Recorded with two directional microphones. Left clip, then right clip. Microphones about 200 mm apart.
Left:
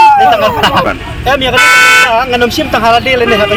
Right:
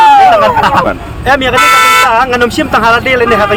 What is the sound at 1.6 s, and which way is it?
Vehicle, 45° right (ahead or behind).